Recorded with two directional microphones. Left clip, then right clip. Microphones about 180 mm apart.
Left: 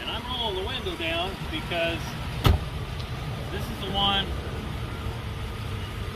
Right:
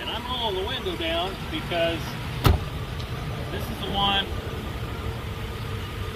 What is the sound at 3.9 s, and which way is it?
Speech, 10° right (ahead or behind).